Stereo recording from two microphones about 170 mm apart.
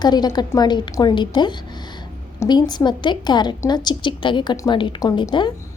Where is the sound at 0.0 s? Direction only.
25° left (ahead or behind).